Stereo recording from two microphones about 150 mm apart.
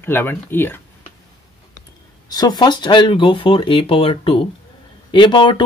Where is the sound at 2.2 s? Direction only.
25° left (ahead or behind).